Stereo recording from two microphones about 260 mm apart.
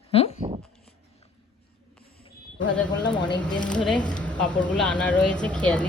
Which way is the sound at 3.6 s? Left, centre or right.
Centre.